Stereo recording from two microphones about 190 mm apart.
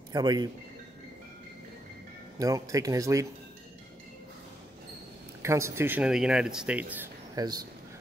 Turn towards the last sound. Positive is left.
turn(degrees=-20)  # may be behind; listen again after turning